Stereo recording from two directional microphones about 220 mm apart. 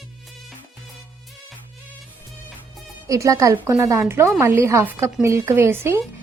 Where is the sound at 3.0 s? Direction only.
15° right (ahead or behind).